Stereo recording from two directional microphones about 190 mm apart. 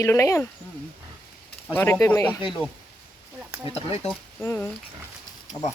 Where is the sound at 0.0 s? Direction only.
15° left (ahead or behind).